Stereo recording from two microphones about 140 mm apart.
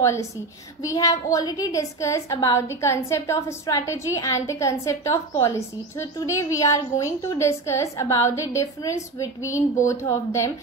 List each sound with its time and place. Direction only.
0.0 s a woman's voice: 20° left (ahead or behind)